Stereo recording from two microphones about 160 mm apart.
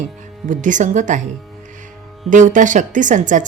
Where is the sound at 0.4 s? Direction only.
50° right (ahead or behind).